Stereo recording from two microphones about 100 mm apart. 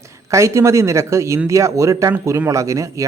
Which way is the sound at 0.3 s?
30° right (ahead or behind).